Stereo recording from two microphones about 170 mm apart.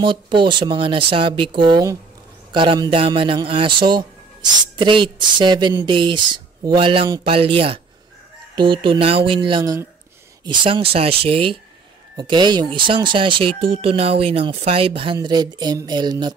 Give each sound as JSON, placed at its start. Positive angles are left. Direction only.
{"t": 0.0, "sound": "a man's voice", "side_deg": -30}